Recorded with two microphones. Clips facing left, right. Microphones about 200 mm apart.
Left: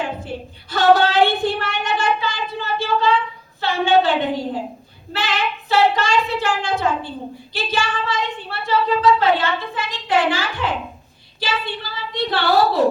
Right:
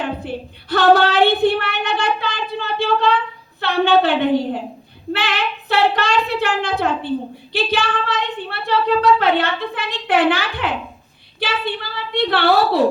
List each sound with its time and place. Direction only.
0.0 s female singing: 60° right (ahead or behind)